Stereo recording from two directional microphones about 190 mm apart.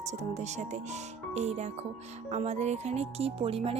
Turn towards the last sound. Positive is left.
turn(degrees=-30)  # may be behind; listen again after turning